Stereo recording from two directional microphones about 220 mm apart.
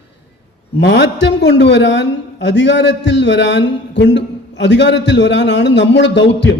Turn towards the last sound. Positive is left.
turn(degrees=55)  # may be behind; listen again after turning